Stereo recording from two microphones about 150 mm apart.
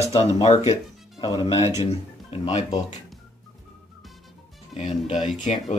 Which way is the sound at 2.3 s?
50° left (ahead or behind).